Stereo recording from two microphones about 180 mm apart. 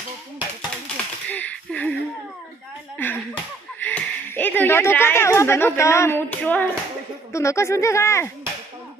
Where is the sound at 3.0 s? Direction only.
10° left (ahead or behind).